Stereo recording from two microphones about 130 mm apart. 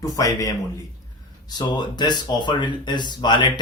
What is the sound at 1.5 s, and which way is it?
Speech, 35° left (ahead or behind).